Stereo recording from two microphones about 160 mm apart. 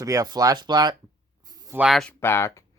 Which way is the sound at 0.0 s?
20° right (ahead or behind).